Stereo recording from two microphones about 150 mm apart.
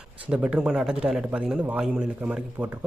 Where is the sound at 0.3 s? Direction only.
10° right (ahead or behind).